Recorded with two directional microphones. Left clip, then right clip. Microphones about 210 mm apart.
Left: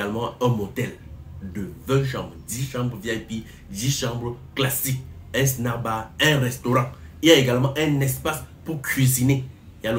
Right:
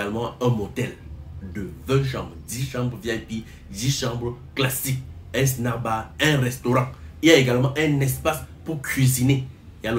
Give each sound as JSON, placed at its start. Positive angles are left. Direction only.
{"t": 0.0, "sound": "speech", "side_deg": 5}